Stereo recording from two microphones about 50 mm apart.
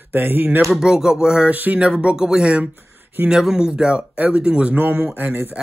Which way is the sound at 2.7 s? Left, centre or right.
Right.